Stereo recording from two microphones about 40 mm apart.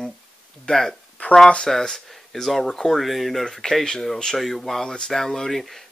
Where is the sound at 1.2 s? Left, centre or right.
Left.